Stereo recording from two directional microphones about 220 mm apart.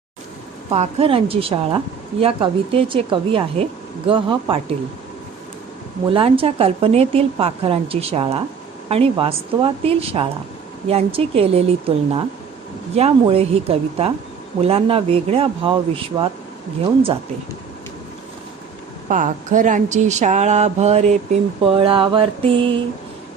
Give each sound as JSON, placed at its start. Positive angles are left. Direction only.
{"t": 0.7, "sound": "speech", "side_deg": -30}
{"t": 6.1, "sound": "speech", "side_deg": -25}
{"t": 19.0, "sound": "speech", "side_deg": -35}